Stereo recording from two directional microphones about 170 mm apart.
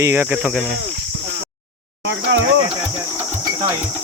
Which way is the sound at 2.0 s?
90° right.